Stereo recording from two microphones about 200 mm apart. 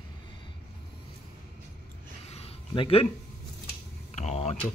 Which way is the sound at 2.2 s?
30° left (ahead or behind).